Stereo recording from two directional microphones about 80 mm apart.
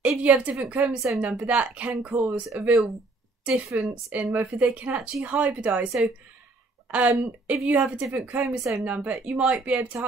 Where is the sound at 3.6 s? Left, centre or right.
Centre.